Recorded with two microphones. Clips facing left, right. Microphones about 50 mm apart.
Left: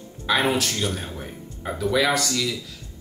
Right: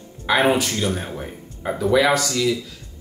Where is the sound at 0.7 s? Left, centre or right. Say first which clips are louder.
Right 3 dB; right.